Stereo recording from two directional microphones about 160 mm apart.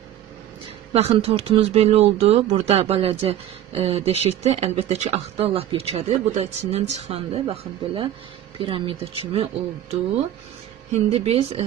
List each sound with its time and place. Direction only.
0.9 s speech: 40° right (ahead or behind)